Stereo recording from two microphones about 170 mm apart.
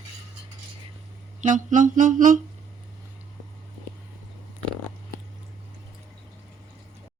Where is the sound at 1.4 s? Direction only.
50° right (ahead or behind).